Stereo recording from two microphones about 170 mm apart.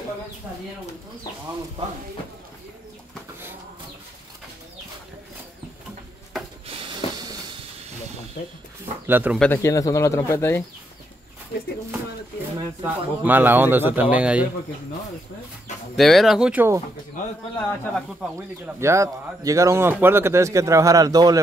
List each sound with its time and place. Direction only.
6.7 s a sound: 30° right (ahead or behind)
9.0 s speech: 10° right (ahead or behind)
9.4 s speech: 15° left (ahead or behind)
12.5 s speech: 10° right (ahead or behind)
16.0 s speech: centre (ahead or behind)
17.6 s speech: 10° left (ahead or behind)
18.8 s speech: 15° right (ahead or behind)